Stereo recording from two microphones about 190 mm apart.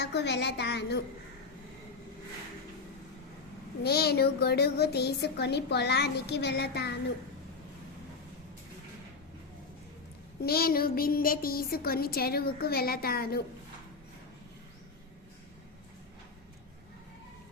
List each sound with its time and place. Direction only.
0.0 s speech: 60° left (ahead or behind)
3.8 s speech: 55° left (ahead or behind)
10.4 s a woman's voice: 55° left (ahead or behind)